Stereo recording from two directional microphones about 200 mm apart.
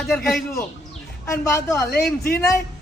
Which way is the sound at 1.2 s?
15° left (ahead or behind).